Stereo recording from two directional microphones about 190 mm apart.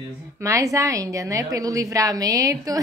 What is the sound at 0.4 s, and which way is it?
A woman's voice, 15° right (ahead or behind).